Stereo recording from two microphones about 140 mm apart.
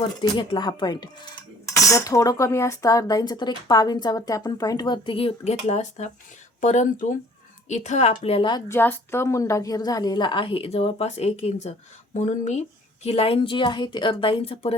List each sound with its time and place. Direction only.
0.0 s speech: 30° left (ahead or behind)
5.6 s a woman's voice: 55° left (ahead or behind); by 8.6 s 35° left (ahead or behind)
8.6 s a woman's voice: 15° left (ahead or behind); by 14.8 s 45° left (ahead or behind)